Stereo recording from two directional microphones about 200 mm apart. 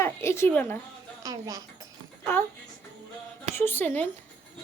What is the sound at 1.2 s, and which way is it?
Speech, 15° right (ahead or behind).